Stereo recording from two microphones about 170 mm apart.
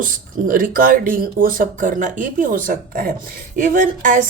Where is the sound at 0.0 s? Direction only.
55° right (ahead or behind).